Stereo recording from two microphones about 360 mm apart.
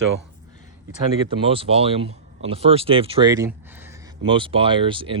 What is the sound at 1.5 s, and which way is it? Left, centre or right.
Speech, centre.